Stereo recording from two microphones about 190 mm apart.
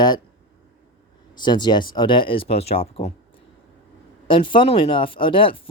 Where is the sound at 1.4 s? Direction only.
20° left (ahead or behind).